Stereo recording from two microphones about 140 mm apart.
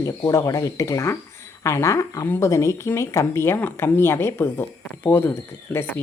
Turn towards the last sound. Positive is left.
turn(degrees=15)  # may be behind; listen again after turning